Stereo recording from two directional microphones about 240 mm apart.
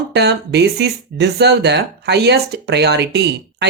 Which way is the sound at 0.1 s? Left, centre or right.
Right.